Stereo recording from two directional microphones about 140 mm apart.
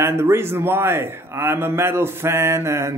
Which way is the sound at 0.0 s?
15° right (ahead or behind).